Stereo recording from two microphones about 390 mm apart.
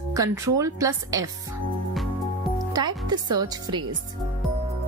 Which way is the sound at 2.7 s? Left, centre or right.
Centre.